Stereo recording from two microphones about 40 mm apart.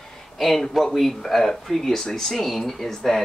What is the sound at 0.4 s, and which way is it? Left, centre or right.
Speech, centre.